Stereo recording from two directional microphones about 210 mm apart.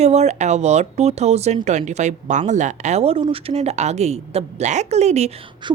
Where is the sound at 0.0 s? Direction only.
30° right (ahead or behind).